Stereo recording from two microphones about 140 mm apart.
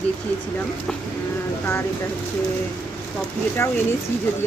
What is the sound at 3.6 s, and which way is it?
Speech, 20° left (ahead or behind).